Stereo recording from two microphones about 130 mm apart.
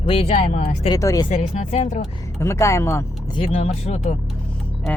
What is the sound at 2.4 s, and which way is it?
Speech, 20° left (ahead or behind).